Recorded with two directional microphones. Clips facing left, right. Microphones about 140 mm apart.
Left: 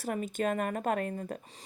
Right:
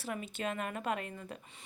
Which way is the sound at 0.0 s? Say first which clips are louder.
Left 6 dB; 45° left (ahead or behind).